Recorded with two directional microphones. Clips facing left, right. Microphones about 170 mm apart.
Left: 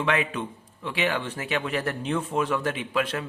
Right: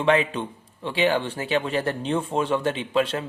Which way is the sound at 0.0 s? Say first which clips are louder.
Right 5 dB; 30° right (ahead or behind).